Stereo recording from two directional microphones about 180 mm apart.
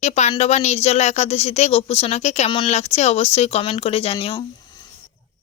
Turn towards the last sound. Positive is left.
turn(degrees=30)  # may be behind; listen again after turning